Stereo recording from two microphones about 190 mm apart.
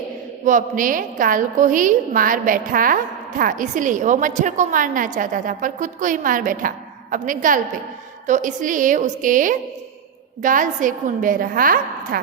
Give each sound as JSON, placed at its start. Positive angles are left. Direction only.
{"t": 0.4, "sound": "a woman's voice", "side_deg": -45}